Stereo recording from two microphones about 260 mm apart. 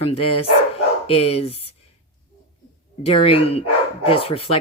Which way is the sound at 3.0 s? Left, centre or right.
Left.